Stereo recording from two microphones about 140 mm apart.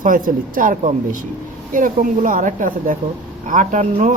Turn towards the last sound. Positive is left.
turn(degrees=-60)  # may be behind; listen again after turning